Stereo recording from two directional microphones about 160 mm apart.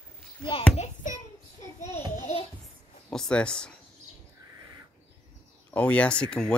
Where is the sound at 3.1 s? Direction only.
5° left (ahead or behind).